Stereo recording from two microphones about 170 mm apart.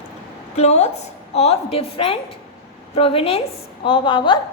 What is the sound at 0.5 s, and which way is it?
A woman's voice, 40° left (ahead or behind).